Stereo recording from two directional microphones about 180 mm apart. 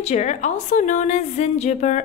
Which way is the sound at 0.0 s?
40° left (ahead or behind).